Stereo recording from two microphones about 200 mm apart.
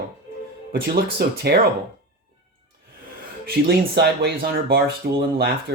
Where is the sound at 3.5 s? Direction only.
55° right (ahead or behind).